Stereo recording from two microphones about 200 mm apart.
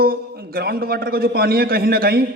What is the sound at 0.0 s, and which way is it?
A man's voice, 50° right (ahead or behind).